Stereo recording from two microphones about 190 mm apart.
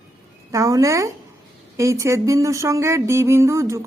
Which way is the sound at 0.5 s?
15° right (ahead or behind).